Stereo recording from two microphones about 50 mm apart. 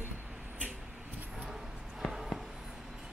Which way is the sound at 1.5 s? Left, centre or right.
Centre.